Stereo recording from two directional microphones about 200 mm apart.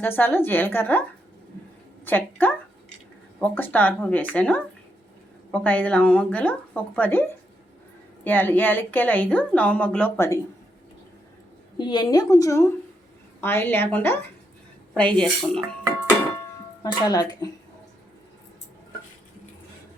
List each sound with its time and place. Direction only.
0.2 s a woman's voice: 10° left (ahead or behind)
2.0 s a woman's voice: 10° left (ahead or behind)
11.8 s a woman's voice: 20° left (ahead or behind); by 15.6 s 5° left (ahead or behind)
16.8 s speech: 20° left (ahead or behind)